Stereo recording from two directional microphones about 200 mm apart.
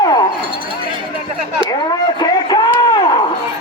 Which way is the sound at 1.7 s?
20° left (ahead or behind).